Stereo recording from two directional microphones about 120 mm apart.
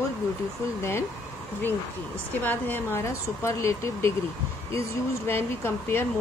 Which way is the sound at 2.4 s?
15° left (ahead or behind).